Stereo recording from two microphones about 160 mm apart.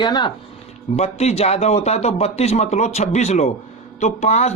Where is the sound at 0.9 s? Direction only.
45° left (ahead or behind).